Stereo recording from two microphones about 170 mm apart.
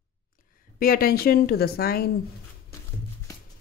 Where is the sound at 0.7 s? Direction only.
60° left (ahead or behind).